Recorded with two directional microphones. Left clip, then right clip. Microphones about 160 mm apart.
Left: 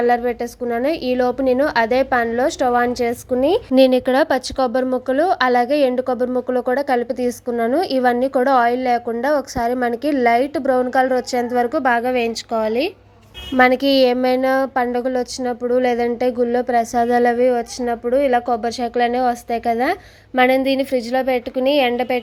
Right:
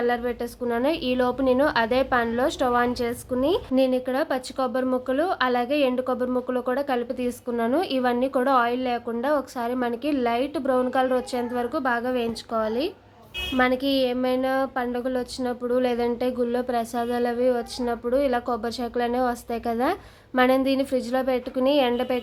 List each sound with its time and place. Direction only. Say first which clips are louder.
0.0 s speech: left 8 dB; 35° left (ahead or behind)
3.8 s speech: left 12 dB; 50° left (ahead or behind); by 12.9 s 25° left (ahead or behind)
13.6 s speech: left 9 dB; 50° left (ahead or behind); by 22.2 s 20° left (ahead or behind)